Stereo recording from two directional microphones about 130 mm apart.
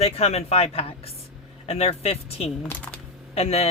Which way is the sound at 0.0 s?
50° left (ahead or behind).